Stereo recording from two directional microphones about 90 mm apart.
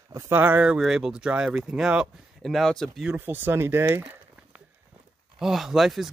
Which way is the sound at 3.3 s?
25° right (ahead or behind).